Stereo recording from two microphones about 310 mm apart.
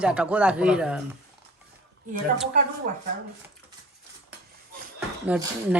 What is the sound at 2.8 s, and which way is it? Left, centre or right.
Speech, right.